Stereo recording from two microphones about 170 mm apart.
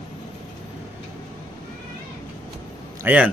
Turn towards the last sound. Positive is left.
turn(degrees=-10)  # may be behind; listen again after turning